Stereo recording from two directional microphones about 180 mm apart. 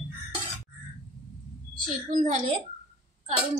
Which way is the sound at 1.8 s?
45° right (ahead or behind).